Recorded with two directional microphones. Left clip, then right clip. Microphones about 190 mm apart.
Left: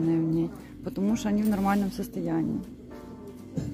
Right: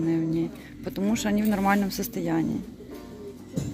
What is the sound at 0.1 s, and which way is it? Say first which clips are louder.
Speech: even; 15° left (ahead or behind).